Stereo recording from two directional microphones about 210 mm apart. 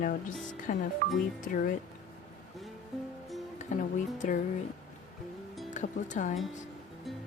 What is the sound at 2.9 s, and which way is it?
Music, centre (ahead or behind).